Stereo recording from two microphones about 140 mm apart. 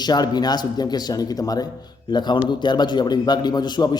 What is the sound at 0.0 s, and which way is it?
Speech, 30° left (ahead or behind).